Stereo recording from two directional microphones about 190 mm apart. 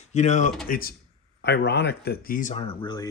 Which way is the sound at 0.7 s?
50° left (ahead or behind).